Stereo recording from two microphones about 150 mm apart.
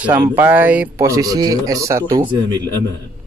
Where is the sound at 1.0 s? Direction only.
25° right (ahead or behind).